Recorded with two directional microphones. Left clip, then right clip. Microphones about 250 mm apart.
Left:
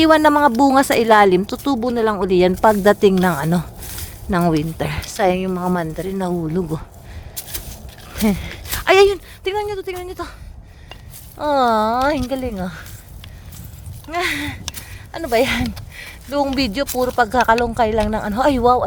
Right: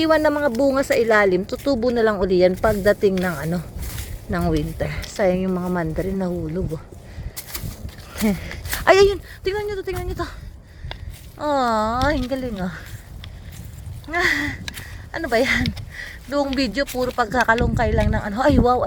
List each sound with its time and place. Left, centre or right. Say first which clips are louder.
0.0 s a woman's voice: left 5 dB; left
8.1 s speech: left 3 dB; centre
11.3 s a woman's voice: left 4 dB; centre
14.1 s a woman's voice: right 1 dB; centre